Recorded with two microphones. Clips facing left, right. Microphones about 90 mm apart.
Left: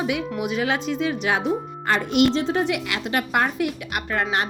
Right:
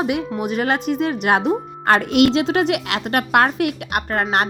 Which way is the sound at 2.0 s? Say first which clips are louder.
Right 4 dB; 90° right.